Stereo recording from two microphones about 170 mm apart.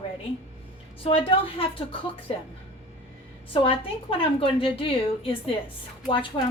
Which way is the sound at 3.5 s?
30° left (ahead or behind).